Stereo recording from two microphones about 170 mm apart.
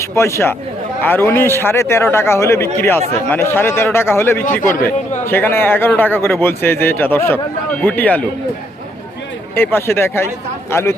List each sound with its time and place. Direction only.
0.0 s a man's voice: 15° left (ahead or behind)
9.6 s a man's voice: 15° left (ahead or behind)